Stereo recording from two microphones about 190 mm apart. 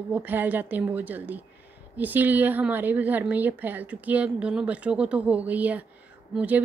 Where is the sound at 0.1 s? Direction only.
10° right (ahead or behind).